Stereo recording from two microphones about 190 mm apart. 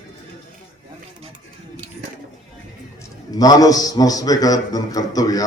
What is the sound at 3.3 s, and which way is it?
A man's voice, 20° left (ahead or behind).